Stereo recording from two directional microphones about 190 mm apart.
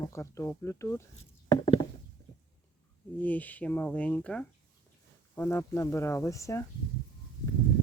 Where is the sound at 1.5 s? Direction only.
25° left (ahead or behind).